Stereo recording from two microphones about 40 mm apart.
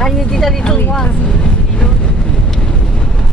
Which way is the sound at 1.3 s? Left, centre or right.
Left.